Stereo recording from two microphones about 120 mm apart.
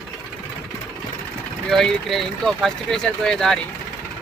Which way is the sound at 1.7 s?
5° left (ahead or behind).